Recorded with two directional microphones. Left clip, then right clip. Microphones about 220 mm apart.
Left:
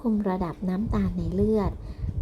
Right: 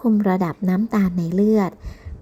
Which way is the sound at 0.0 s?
35° right (ahead or behind).